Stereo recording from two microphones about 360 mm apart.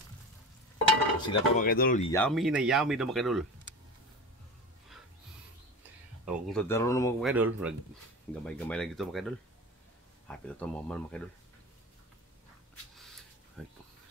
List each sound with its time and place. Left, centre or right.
1.2 s speech: centre
2.1 s speech: centre
6.2 s speech: centre
12.9 s a sound: centre
13.6 s speech: centre